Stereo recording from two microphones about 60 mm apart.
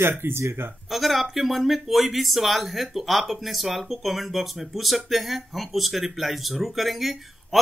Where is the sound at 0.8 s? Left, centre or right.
Centre.